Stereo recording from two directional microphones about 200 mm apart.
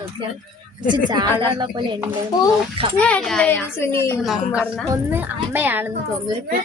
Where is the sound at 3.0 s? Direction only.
5° left (ahead or behind).